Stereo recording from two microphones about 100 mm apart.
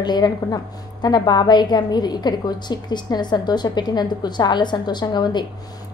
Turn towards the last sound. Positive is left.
turn(degrees=45)  # may be behind; listen again after turning